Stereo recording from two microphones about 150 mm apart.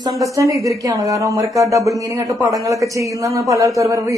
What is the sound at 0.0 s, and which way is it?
Speech, 20° right (ahead or behind).